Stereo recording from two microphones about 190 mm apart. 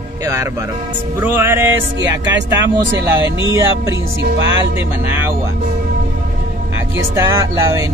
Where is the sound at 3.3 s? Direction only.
80° right.